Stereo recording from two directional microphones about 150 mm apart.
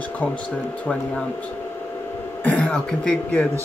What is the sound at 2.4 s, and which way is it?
Speech, 10° left (ahead or behind).